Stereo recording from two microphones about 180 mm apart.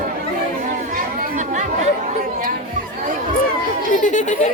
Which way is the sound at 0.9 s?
45° right (ahead or behind).